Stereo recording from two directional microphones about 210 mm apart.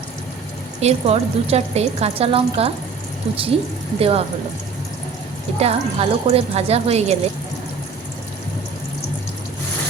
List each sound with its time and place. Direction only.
0.8 s speech: 30° right (ahead or behind)
4.0 s speech: 30° right (ahead or behind)
5.5 s speech: 30° right (ahead or behind)